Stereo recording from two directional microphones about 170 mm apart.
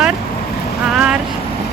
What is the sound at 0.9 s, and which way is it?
Speech, 5° right (ahead or behind).